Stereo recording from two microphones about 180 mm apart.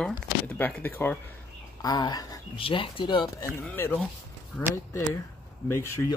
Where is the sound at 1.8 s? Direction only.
20° left (ahead or behind).